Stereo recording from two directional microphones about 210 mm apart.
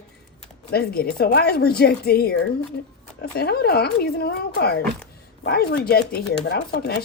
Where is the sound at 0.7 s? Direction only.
45° left (ahead or behind).